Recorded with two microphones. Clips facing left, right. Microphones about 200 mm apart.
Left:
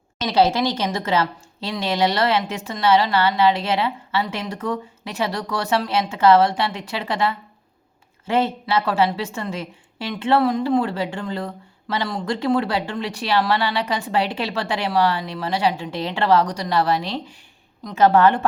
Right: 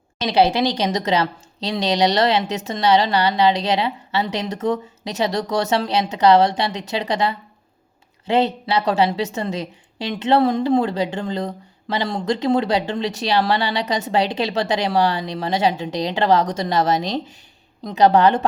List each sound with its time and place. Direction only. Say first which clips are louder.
0.3 s a woman's voice: right 1 dB; 15° right (ahead or behind)